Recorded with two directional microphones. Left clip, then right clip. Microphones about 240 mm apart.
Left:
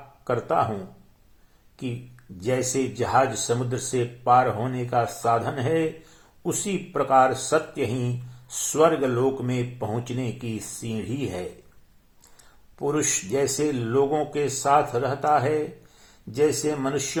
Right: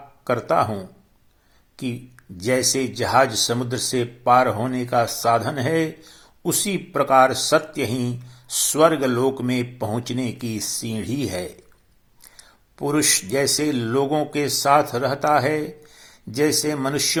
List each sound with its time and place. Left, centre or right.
0.3 s speech: right